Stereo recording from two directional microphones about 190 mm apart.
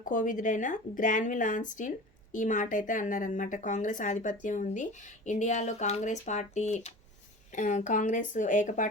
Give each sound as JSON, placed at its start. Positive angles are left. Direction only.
{"t": 0.0, "sound": "a woman's voice", "side_deg": 45}